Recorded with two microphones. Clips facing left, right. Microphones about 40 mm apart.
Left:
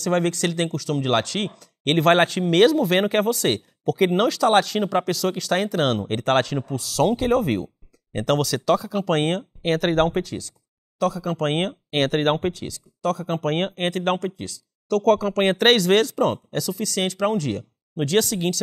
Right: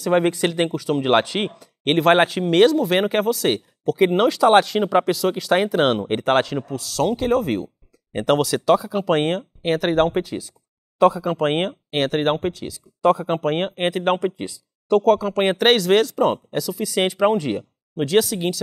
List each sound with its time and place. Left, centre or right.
0.0 s speech: centre
11.0 s speech: right; by 12.8 s centre
13.0 s speech: right
13.4 s speech: centre
15.0 s speech: centre
16.9 s speech: centre
17.9 s speech: centre